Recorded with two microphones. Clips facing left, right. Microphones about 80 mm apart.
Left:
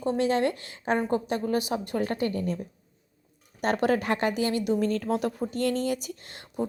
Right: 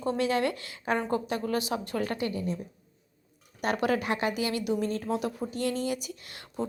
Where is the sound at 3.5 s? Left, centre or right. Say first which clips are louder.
Left 3 dB; left.